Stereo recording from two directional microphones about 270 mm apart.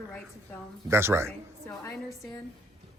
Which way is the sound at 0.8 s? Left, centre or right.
Centre.